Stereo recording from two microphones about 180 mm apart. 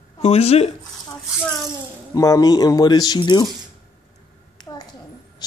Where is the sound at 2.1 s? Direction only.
20° left (ahead or behind).